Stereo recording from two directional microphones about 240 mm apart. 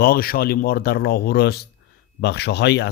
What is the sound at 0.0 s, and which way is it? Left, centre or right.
Speech, left.